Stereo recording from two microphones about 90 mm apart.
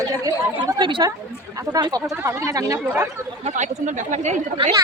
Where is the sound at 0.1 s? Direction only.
40° right (ahead or behind).